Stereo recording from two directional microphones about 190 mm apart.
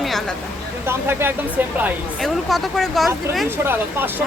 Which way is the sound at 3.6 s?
10° right (ahead or behind).